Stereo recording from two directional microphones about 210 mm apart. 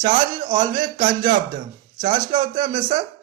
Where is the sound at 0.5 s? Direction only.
20° right (ahead or behind).